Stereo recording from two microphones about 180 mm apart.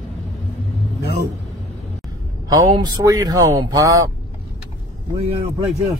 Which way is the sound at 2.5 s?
20° right (ahead or behind).